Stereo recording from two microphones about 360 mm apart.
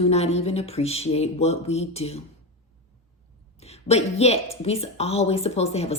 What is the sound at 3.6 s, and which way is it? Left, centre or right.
Speech, centre.